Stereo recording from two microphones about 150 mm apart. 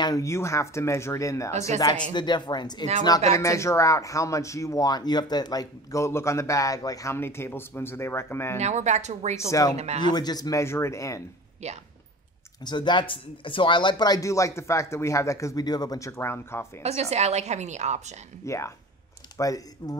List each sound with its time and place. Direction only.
0.0 s speech: 20° left (ahead or behind)
8.5 s a woman's voice: 50° right (ahead or behind)
9.5 s speech: 25° left (ahead or behind)
9.8 s a woman's voice: 45° right (ahead or behind)
10.0 s speech: 25° left (ahead or behind)
11.6 s a woman's voice: 45° right (ahead or behind)
12.6 s speech: 30° left (ahead or behind); by 16.8 s 15° left (ahead or behind)
16.8 s a woman's voice: 45° right (ahead or behind)
18.4 s speech: 20° left (ahead or behind)